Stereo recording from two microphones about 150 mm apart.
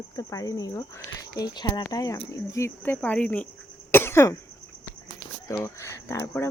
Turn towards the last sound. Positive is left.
turn(degrees=20)  # may be behind; listen again after turning